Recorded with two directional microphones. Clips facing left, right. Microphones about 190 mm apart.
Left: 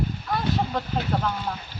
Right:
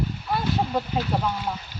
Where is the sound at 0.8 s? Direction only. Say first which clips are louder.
Right 3 dB; 5° right (ahead or behind).